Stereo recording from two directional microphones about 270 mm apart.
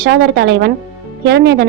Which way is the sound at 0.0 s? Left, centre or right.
Right.